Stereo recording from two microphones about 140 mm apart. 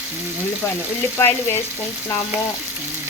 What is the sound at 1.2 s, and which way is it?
Speech, 20° left (ahead or behind).